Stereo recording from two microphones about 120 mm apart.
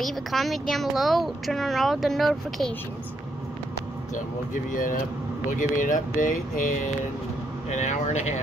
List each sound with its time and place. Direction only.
0.0 s speech: centre (ahead or behind)
5.5 s speech: 90° left; by 8.4 s 70° left (ahead or behind)